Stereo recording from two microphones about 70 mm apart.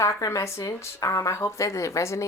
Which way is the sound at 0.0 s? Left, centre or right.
Left.